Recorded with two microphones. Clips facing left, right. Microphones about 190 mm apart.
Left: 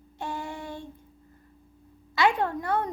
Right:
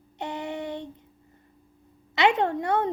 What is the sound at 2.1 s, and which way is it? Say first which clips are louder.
Child singing: right 2 dB; 20° right (ahead or behind).